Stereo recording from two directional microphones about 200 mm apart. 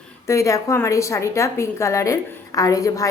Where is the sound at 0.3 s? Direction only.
15° left (ahead or behind).